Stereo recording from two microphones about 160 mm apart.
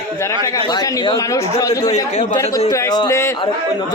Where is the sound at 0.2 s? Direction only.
20° left (ahead or behind).